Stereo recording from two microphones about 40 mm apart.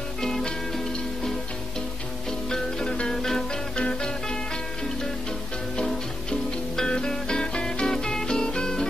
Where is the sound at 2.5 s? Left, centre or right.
Centre.